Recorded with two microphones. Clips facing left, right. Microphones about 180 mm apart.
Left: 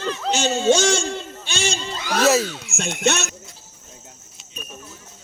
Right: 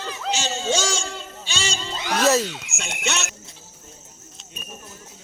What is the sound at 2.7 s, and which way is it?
Speech, 50° left (ahead or behind).